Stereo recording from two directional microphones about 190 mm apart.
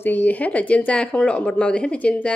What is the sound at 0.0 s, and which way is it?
Speech, 10° left (ahead or behind).